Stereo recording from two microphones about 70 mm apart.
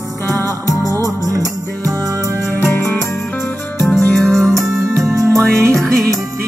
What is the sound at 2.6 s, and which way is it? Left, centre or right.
Music, left.